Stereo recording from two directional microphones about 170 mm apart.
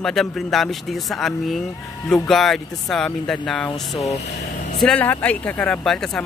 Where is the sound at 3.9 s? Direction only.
40° left (ahead or behind).